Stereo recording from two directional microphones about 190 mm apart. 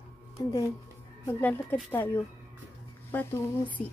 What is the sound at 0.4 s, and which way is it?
Speech, 20° left (ahead or behind).